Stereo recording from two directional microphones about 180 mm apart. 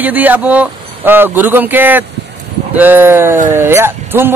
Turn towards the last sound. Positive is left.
turn(degrees=-15)  # may be behind; listen again after turning